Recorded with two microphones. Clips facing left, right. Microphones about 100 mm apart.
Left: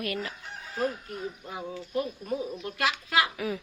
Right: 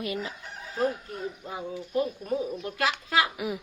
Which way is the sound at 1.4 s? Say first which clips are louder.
Right 2 dB; 15° right (ahead or behind).